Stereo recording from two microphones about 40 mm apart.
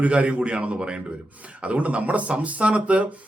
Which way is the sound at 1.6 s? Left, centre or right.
Right.